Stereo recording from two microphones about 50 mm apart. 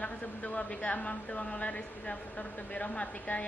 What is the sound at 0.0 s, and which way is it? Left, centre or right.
A woman's voice, left.